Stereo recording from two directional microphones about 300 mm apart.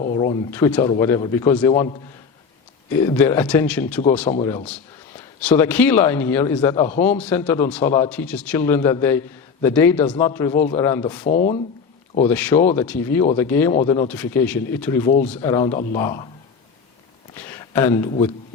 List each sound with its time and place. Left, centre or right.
0.0 s a sound: left
0.5 s speech: centre
11.3 s speech: left
12.3 s speech: centre
15.7 s speech: left
16.0 s speech: centre
17.3 s a sound: centre